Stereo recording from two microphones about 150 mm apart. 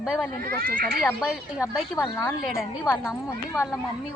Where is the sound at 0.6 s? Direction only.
70° right (ahead or behind).